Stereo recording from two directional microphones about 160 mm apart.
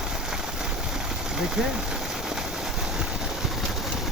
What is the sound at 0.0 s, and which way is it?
Engine, 5° right (ahead or behind).